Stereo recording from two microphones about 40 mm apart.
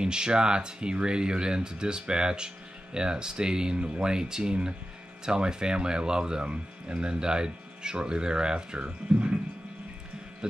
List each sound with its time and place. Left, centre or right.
0.0 s speech: right